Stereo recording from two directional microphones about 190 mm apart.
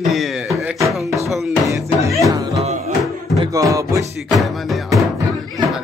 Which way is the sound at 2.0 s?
15° right (ahead or behind).